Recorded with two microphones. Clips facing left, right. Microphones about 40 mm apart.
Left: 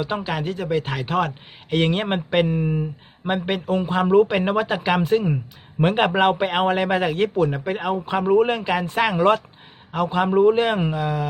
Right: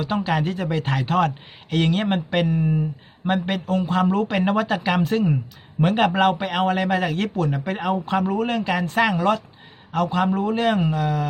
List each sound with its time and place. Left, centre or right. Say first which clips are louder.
0.0 s speech: right 2 dB; centre
1.7 s speech: even; centre
5.8 s a man's voice: even; left
9.1 s speech: left 3 dB; left
9.9 s speech: even; centre
10.2 s speech: left 4 dB; left